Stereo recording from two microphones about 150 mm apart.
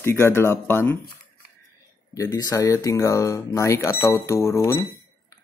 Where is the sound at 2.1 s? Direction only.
25° left (ahead or behind).